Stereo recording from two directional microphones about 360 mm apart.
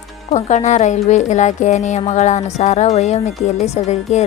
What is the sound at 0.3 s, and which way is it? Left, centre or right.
A woman's voice, centre.